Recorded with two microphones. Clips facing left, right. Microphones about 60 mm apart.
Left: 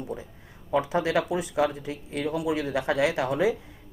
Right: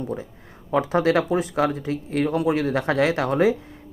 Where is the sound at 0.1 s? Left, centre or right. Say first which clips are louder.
Right 6 dB; right.